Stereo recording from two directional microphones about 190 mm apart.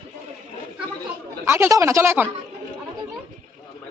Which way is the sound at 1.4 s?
15° right (ahead or behind).